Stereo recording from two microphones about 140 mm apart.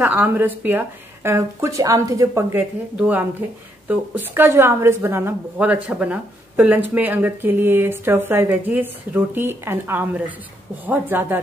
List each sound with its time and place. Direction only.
0.0 s a woman's voice: 15° right (ahead or behind)